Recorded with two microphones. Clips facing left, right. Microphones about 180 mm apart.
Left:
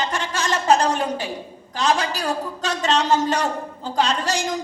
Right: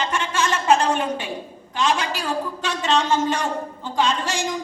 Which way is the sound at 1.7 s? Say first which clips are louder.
Left 1 dB; 40° left (ahead or behind).